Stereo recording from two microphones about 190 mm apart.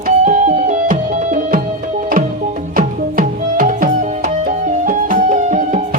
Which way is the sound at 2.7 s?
45° right (ahead or behind).